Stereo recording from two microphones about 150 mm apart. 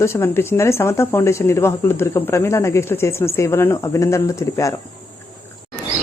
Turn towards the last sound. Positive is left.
turn(degrees=20)  # may be behind; listen again after turning